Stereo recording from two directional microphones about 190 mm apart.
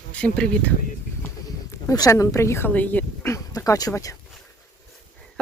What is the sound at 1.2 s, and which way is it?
Speech, 15° left (ahead or behind).